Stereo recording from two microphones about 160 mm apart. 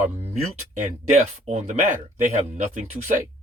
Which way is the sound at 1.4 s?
45° right (ahead or behind).